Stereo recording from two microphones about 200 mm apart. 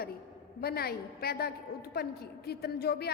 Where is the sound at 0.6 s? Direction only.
50° left (ahead or behind).